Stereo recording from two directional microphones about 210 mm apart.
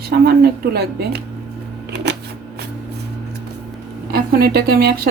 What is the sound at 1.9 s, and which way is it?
Shuffling cards, 55° right (ahead or behind).